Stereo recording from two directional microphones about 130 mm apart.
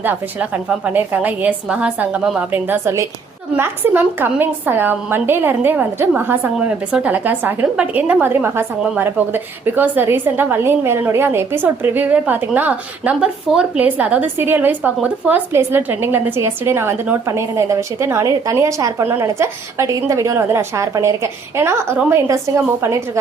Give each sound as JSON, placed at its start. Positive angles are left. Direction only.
{"t": 0.0, "sound": "a woman's voice", "side_deg": -15}